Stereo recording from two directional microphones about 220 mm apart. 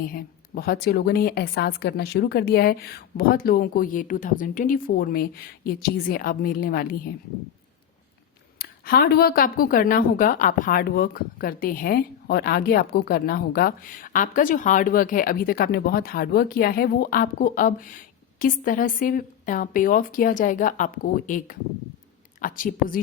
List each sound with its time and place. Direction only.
0.1 s a woman's voice: 40° left (ahead or behind)
8.5 s a woman's voice: 45° left (ahead or behind)